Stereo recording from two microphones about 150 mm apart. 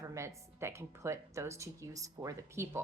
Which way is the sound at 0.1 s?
20° right (ahead or behind).